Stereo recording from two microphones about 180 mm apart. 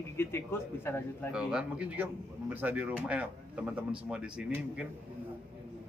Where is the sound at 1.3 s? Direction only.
5° right (ahead or behind).